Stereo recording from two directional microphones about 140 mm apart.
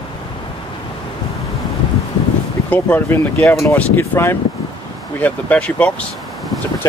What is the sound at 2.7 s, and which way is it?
Speech, 10° left (ahead or behind).